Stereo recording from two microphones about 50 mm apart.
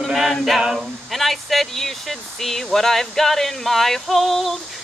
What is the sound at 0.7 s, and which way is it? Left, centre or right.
Speech, centre.